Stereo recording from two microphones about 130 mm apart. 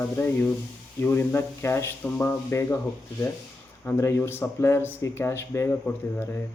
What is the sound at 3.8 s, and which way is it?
Speech, 20° left (ahead or behind).